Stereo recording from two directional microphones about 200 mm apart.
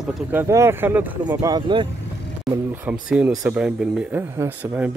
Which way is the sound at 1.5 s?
25° right (ahead or behind).